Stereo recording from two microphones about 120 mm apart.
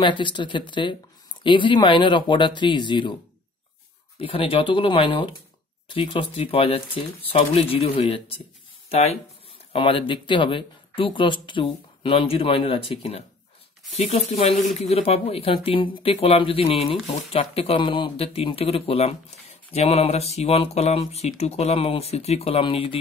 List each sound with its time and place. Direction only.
0.0 s speech: 40° left (ahead or behind)
4.2 s speech: 50° left (ahead or behind)
9.7 s speech: 45° left (ahead or behind)